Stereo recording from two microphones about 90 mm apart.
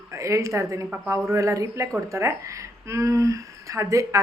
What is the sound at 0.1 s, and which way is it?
A woman's voice, 35° right (ahead or behind).